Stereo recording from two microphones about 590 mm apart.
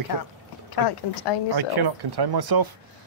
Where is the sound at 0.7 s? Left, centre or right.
Left.